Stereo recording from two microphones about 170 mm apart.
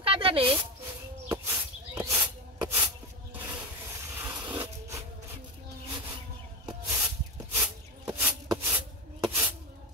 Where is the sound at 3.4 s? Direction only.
10° right (ahead or behind).